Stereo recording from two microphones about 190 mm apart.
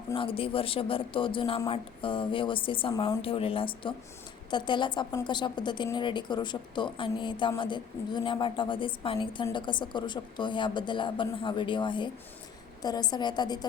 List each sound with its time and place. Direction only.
0.1 s a woman's voice: 30° left (ahead or behind)